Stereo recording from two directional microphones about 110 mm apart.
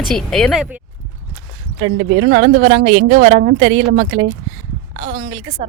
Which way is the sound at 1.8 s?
90° right.